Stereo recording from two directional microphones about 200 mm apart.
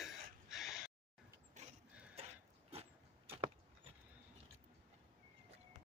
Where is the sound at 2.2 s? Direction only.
30° right (ahead or behind).